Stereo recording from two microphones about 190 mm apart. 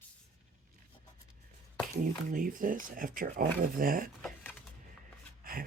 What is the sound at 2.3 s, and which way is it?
Speech, 45° right (ahead or behind).